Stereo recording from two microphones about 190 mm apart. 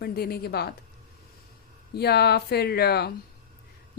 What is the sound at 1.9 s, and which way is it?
A woman's voice, 60° left (ahead or behind).